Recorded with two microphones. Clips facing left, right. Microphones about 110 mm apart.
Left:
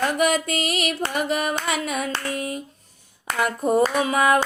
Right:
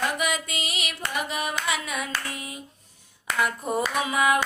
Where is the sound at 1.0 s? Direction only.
40° left (ahead or behind).